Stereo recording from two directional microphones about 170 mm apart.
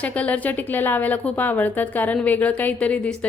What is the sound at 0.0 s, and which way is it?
A woman's voice, 10° left (ahead or behind).